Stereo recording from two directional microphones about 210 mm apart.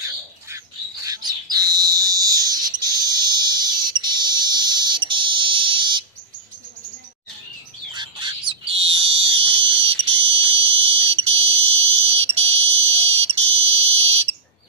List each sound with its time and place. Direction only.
1.0 s bird: 20° right (ahead or behind)
3.0 s fire alarm: 20° right (ahead or behind)
7.9 s bird: 20° right (ahead or behind)
13.7 s fire alarm: 30° right (ahead or behind)